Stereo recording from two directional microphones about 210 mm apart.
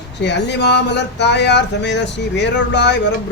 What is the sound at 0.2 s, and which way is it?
Speech, 55° left (ahead or behind).